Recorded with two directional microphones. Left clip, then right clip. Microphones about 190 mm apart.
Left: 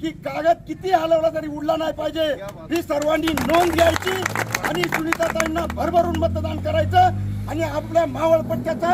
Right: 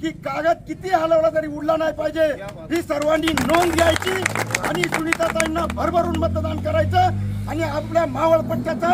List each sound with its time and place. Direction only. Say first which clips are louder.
0.0 s a man's voice: even; 5° right (ahead or behind)
3.9 s speech: right 1 dB; 25° left (ahead or behind)
5.5 s a man's voice: left 1 dB; 5° right (ahead or behind)